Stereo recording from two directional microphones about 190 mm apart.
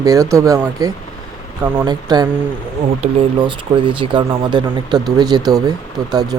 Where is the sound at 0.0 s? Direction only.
15° right (ahead or behind).